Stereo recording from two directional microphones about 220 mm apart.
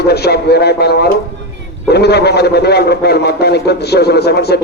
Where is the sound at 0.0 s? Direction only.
45° left (ahead or behind).